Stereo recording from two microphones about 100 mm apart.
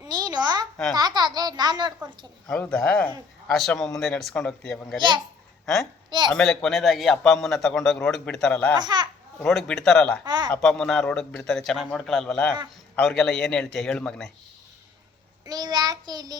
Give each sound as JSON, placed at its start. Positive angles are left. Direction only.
{"t": 0.0, "sound": "a sound", "side_deg": -40}
{"t": 0.9, "sound": "a child's voice", "side_deg": -45}
{"t": 2.7, "sound": "a man's voice", "side_deg": 10}
{"t": 4.9, "sound": "a child's voice", "side_deg": -50}
{"t": 5.6, "sound": "a man's voice", "side_deg": 5}
{"t": 6.1, "sound": "speech", "side_deg": -50}
{"t": 6.3, "sound": "a man's voice", "side_deg": 5}
{"t": 8.7, "sound": "a child's voice", "side_deg": -45}
{"t": 9.4, "sound": "a man's voice", "side_deg": 5}
{"t": 10.2, "sound": "a child's voice", "side_deg": -50}
{"t": 10.5, "sound": "a man's voice", "side_deg": 5}
{"t": 15.4, "sound": "child singing", "side_deg": -45}